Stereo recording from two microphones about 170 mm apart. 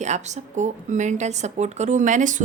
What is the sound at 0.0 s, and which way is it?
A woman's voice, 45° right (ahead or behind).